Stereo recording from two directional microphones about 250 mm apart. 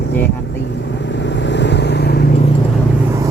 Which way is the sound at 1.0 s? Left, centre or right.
Left.